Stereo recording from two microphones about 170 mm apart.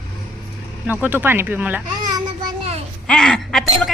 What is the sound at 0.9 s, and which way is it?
Speech, 10° right (ahead or behind).